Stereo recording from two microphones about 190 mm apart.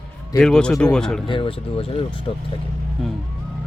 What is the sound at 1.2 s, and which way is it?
Speech, 25° left (ahead or behind).